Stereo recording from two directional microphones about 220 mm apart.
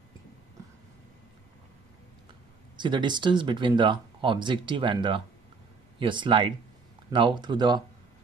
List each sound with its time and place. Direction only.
2.8 s speech: 20° right (ahead or behind)